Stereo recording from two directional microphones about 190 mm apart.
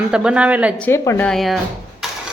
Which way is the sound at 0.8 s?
15° left (ahead or behind).